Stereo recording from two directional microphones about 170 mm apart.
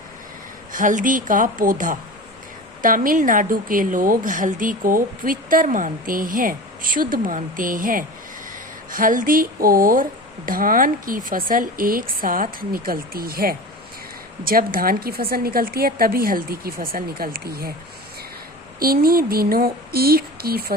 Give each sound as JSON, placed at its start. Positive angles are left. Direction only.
{"t": 0.7, "sound": "a woman's voice", "side_deg": -50}
{"t": 18.8, "sound": "speech", "side_deg": -60}